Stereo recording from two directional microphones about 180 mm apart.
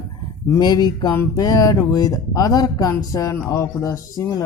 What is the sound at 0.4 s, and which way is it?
Speech, 20° left (ahead or behind).